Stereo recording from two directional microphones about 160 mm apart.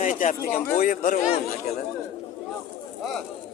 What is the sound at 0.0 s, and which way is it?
A man's voice, 50° left (ahead or behind).